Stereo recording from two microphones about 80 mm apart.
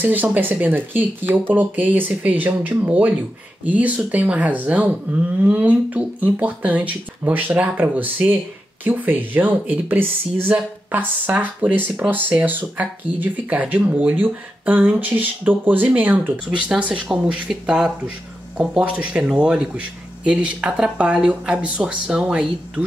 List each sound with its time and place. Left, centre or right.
0.0 s speech: right